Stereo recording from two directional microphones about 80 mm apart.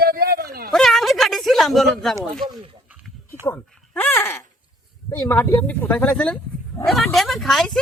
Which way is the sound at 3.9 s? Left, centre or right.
Left.